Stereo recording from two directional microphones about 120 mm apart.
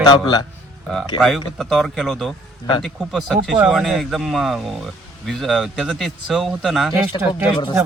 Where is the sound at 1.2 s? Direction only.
Centre (ahead or behind).